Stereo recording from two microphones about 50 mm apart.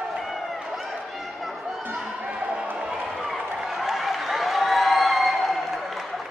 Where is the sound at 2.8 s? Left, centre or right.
Centre.